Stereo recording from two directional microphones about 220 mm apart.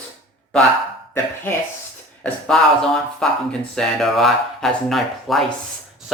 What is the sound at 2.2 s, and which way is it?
Speech, 5° left (ahead or behind).